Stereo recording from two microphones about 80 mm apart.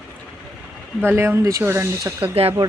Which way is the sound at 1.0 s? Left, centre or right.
Right.